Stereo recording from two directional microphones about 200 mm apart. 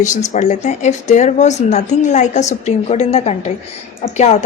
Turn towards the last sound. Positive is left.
turn(degrees=35)  # may be behind; listen again after turning